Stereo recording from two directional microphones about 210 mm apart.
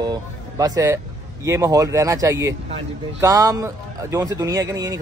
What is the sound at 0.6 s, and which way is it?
Speech, 15° right (ahead or behind).